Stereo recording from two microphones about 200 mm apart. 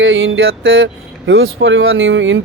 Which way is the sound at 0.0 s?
70° right (ahead or behind).